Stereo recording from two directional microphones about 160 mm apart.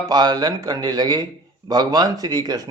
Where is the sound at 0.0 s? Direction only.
25° right (ahead or behind).